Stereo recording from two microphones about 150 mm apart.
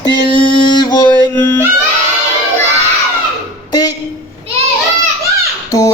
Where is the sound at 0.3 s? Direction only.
35° left (ahead or behind).